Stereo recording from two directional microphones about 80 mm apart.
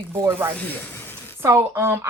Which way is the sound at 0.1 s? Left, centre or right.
Right.